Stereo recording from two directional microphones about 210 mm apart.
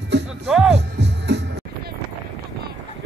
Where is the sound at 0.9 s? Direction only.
55° right (ahead or behind).